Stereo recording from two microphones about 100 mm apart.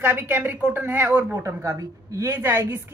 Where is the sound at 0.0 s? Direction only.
20° right (ahead or behind).